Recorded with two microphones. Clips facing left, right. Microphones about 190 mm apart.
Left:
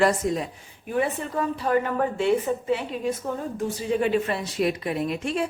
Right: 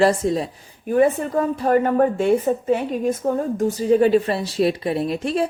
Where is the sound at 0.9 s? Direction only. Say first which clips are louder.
Right 8 dB; 45° right (ahead or behind).